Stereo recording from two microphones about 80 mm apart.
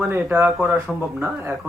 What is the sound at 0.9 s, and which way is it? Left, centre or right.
Speech, centre.